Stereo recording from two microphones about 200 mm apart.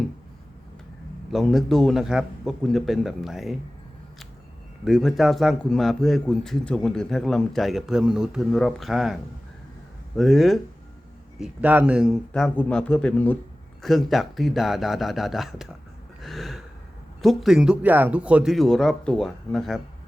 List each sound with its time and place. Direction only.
1.3 s a man's voice: centre (ahead or behind)
4.9 s a man's voice: centre (ahead or behind)
16.2 s gasp: centre (ahead or behind)
17.2 s a man's voice: centre (ahead or behind)